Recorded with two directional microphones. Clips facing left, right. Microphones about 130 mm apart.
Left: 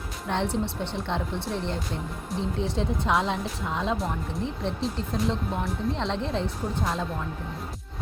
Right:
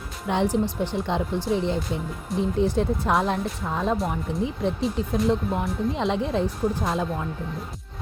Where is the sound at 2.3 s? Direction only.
Centre (ahead or behind).